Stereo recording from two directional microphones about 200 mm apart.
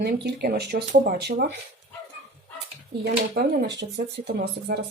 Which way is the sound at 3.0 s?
50° right (ahead or behind).